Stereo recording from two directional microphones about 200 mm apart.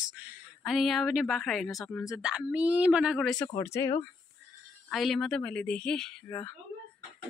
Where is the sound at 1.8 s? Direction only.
15° left (ahead or behind).